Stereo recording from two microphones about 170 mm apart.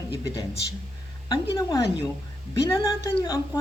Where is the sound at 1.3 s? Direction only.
20° left (ahead or behind).